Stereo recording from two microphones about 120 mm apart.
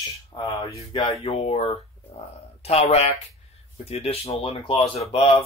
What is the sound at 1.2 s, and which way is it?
Speech, 55° left (ahead or behind).